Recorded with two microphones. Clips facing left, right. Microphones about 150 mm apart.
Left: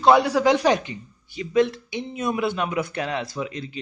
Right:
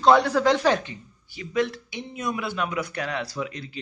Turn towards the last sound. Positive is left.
turn(degrees=20)  # may be behind; listen again after turning